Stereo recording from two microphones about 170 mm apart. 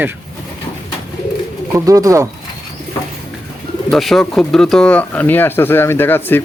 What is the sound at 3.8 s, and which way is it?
Speech, centre (ahead or behind).